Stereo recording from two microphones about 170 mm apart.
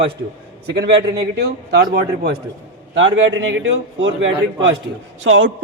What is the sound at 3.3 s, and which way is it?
A man's voice, 90° right.